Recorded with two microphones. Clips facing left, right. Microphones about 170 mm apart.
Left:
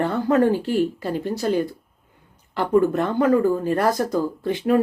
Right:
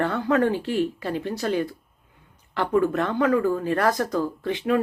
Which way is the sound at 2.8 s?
5° left (ahead or behind).